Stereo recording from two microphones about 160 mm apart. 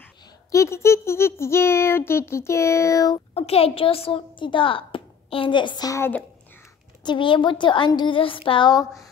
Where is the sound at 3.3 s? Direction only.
40° left (ahead or behind); by 6.1 s 20° left (ahead or behind).